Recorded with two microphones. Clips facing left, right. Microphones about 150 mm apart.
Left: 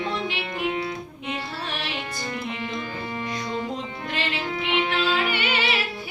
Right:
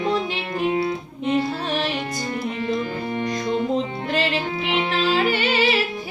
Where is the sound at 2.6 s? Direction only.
40° right (ahead or behind).